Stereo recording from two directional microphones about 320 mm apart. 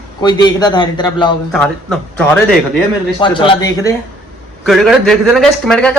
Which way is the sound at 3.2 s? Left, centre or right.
Centre.